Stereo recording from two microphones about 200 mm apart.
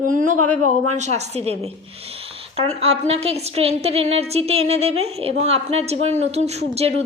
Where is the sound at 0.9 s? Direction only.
35° right (ahead or behind).